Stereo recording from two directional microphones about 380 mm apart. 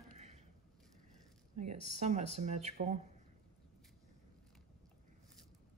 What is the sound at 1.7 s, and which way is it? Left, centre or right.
Speech, centre.